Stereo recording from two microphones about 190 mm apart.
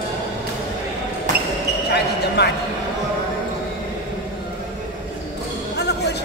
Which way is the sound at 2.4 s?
60° left (ahead or behind).